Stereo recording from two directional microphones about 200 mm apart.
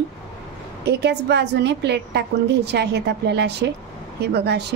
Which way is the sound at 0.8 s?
55° right (ahead or behind).